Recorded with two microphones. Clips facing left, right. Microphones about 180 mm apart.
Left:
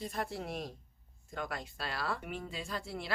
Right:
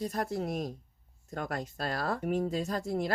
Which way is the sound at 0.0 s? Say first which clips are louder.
Right 6 dB; 40° right (ahead or behind).